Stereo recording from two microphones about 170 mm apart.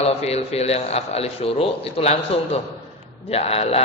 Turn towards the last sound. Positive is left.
turn(degrees=35)  # may be behind; listen again after turning